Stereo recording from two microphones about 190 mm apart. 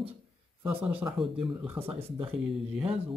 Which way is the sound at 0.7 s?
10° right (ahead or behind).